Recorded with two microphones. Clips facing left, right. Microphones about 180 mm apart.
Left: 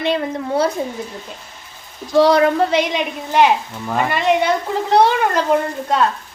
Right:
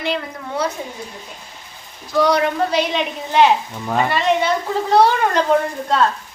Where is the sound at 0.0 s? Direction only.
25° left (ahead or behind).